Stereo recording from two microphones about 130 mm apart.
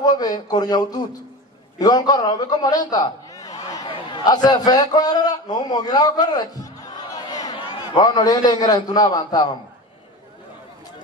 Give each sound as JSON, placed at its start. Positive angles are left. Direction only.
{"t": 0.0, "sound": "a man's voice", "side_deg": 30}